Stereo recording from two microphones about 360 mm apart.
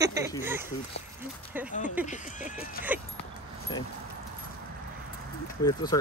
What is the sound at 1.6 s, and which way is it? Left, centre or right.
Speech, centre.